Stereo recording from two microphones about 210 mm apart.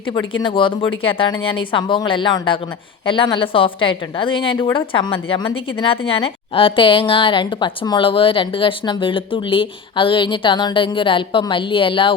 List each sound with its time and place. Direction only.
0.4 s a woman's voice: 25° left (ahead or behind)